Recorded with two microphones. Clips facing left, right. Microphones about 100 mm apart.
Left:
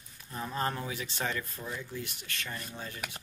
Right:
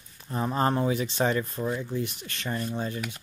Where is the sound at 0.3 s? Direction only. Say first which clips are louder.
Right 8 dB; 35° right (ahead or behind).